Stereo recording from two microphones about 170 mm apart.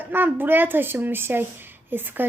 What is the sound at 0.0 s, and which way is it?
Speech, 10° right (ahead or behind).